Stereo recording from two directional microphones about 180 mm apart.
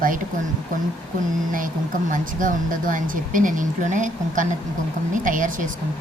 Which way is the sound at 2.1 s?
45° right (ahead or behind).